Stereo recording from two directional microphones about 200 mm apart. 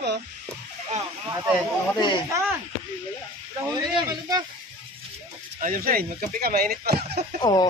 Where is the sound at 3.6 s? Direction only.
20° right (ahead or behind).